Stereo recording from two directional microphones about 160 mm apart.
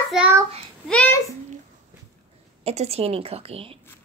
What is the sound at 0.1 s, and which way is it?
Child singing, 5° right (ahead or behind).